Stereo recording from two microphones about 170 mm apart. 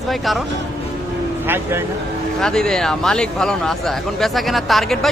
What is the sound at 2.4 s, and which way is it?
Speech, 5° left (ahead or behind).